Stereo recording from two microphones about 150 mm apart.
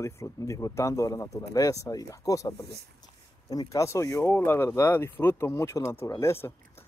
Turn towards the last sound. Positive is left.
turn(degrees=15)  # may be behind; listen again after turning